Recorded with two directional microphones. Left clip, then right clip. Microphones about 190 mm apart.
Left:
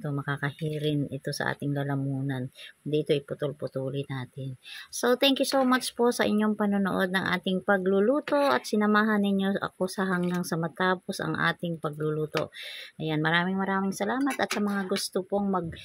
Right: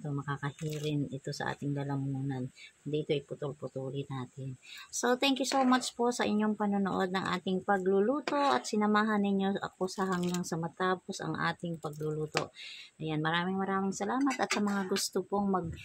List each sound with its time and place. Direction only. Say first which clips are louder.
0.0 s speech: left 6 dB; 25° left (ahead or behind)
15.1 s speech: left 4 dB; 15° left (ahead or behind)